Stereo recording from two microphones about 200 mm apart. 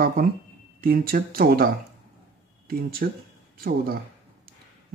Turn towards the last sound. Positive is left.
turn(degrees=-45)  # may be behind; listen again after turning